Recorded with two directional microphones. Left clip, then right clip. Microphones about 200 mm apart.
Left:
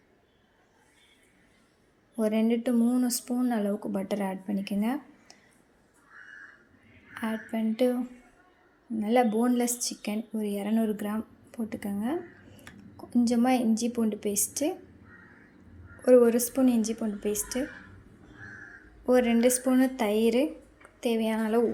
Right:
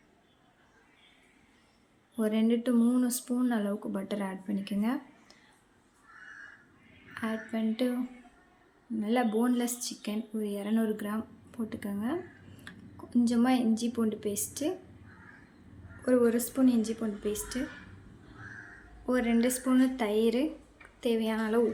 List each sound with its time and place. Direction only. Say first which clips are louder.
2.1 s a woman's voice: left 2 dB; 10° left (ahead or behind)
7.1 s a woman's voice: left 2 dB; 15° left (ahead or behind)
9.0 s a woman's voice: left 4 dB; 10° left (ahead or behind)
12.7 s a sound: right 2 dB; 15° left (ahead or behind)
13.2 s a woman's voice: left 3 dB; 10° left (ahead or behind)
16.0 s a woman's voice: left 6 dB; 15° left (ahead or behind)
19.0 s a woman's voice: left 6 dB; 15° left (ahead or behind)